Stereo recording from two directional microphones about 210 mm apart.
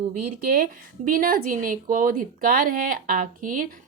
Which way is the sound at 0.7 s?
45° right (ahead or behind).